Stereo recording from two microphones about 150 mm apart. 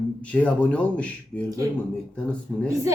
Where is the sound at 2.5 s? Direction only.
5° right (ahead or behind).